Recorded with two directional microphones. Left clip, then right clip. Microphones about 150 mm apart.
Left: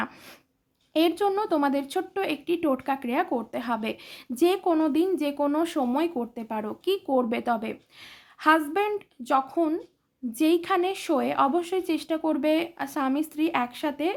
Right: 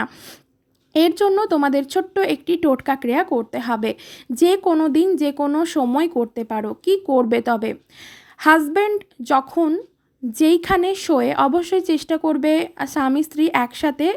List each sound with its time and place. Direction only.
0.9 s a woman's voice: 35° right (ahead or behind)
10.3 s a woman's voice: 40° right (ahead or behind)